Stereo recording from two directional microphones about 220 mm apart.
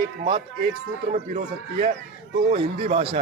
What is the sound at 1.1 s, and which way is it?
A man's voice, 30° right (ahead or behind).